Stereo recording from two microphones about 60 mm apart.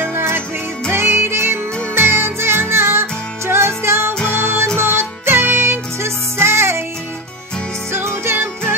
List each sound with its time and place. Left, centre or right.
0.0 s music: right
7.9 s music: right